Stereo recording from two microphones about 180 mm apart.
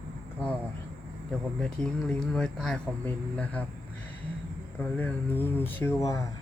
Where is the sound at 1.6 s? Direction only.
5° left (ahead or behind).